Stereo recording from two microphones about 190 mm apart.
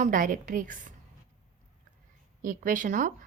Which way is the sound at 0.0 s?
45° right (ahead or behind).